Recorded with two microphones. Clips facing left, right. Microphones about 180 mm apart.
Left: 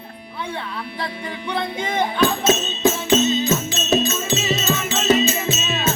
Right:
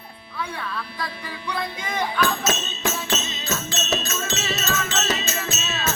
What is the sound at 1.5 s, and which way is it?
Speech, 25° left (ahead or behind).